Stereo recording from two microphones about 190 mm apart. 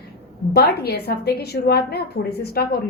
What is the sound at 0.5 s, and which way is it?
A woman's voice, 55° left (ahead or behind).